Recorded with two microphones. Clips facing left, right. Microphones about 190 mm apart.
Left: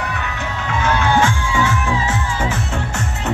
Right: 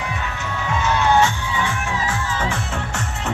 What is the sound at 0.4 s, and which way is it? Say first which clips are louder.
Music: left 1 dB; 50° left (ahead or behind).